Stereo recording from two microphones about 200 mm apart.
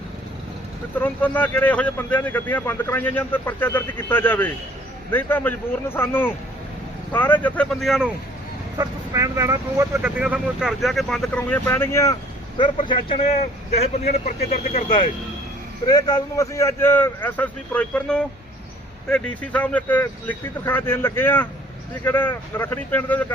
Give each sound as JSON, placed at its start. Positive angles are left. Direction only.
{"t": 0.9, "sound": "speech", "side_deg": 10}
{"t": 8.8, "sound": "speech", "side_deg": -15}
{"t": 12.5, "sound": "a man's voice", "side_deg": 25}